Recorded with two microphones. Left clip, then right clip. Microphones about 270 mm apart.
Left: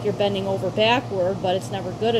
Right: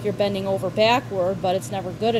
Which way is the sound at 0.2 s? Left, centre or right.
Right.